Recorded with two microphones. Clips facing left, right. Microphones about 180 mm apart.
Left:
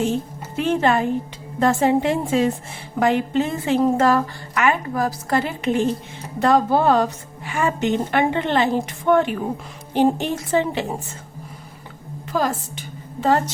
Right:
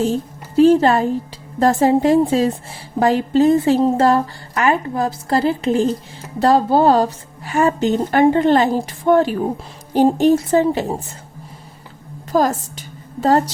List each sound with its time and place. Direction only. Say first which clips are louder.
0.0 s a woman's voice: right 3 dB; 35° right (ahead or behind)
12.3 s a woman's voice: right 5 dB; 40° right (ahead or behind)